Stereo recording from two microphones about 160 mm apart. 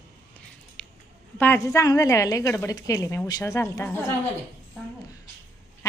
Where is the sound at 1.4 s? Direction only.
15° left (ahead or behind).